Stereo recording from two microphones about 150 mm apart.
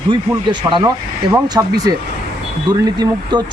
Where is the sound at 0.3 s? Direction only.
30° right (ahead or behind).